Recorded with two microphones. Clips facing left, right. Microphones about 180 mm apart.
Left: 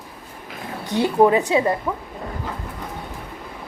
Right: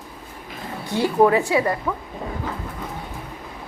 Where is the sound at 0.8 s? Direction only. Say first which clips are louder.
Left 1 dB; 20° left (ahead or behind).